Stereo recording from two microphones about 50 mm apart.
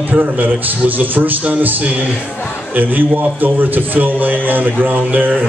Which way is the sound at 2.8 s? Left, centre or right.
Right.